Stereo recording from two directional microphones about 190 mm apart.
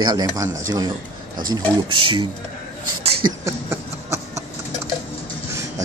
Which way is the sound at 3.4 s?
15° right (ahead or behind).